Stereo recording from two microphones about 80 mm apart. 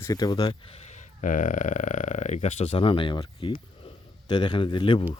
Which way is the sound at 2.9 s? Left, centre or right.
Left.